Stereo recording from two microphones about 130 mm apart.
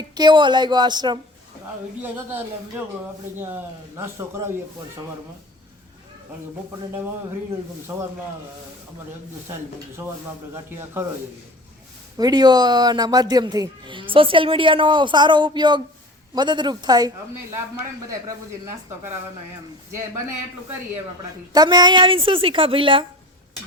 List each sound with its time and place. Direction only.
0.1 s speech: 35° right (ahead or behind)
2.0 s a man's voice: 15° right (ahead or behind)
7.9 s speech: 15° right (ahead or behind)
10.5 s speech: 20° right (ahead or behind)
12.1 s speech: 30° right (ahead or behind)
21.5 s speech: 30° right (ahead or behind)